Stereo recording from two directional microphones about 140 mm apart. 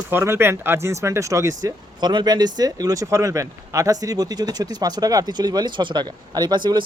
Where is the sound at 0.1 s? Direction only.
15° right (ahead or behind).